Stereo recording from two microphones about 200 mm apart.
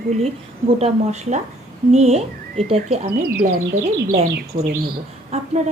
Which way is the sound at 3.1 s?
50° right (ahead or behind).